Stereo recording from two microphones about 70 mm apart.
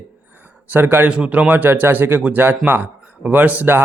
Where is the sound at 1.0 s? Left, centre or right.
Centre.